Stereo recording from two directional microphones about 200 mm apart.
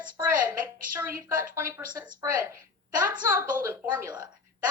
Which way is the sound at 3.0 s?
10° right (ahead or behind).